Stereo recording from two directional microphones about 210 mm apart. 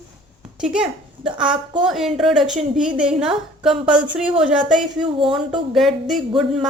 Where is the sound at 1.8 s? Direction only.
Centre (ahead or behind).